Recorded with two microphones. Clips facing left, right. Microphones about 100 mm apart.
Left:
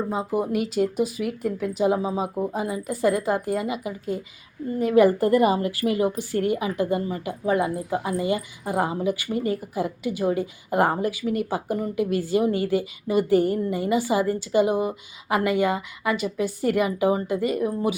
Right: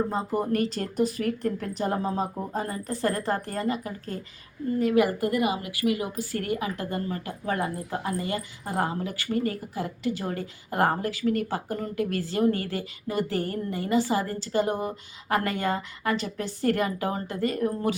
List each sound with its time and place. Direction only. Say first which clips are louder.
0.1 s a woman's voice: left 2 dB; 5° left (ahead or behind)
4.8 s a woman's voice: left 5 dB; 25° left (ahead or behind)